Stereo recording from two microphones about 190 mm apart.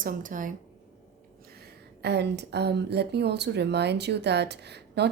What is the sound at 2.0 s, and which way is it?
Speech, 60° right (ahead or behind).